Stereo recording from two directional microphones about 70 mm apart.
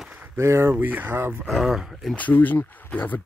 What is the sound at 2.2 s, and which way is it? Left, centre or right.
Speech, left.